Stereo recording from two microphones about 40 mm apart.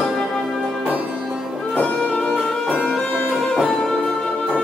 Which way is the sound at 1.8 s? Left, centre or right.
Left.